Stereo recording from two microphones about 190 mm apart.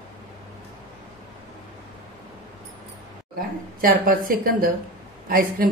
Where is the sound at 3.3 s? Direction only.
50° right (ahead or behind).